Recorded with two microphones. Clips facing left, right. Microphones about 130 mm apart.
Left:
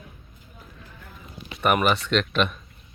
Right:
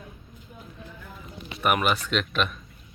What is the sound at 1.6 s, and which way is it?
Speech, centre (ahead or behind).